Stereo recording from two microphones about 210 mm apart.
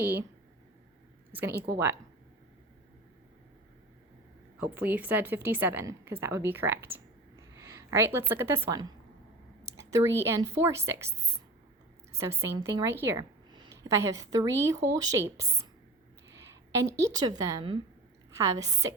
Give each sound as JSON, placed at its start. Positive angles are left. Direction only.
{"t": 0.0, "sound": "a woman's voice", "side_deg": -10}
{"t": 1.3, "sound": "speech", "side_deg": -10}
{"t": 4.6, "sound": "a woman's voice", "side_deg": -5}
{"t": 9.9, "sound": "a woman's voice", "side_deg": -10}
{"t": 12.1, "sound": "a woman's voice", "side_deg": -15}
{"t": 16.7, "sound": "a woman's voice", "side_deg": -15}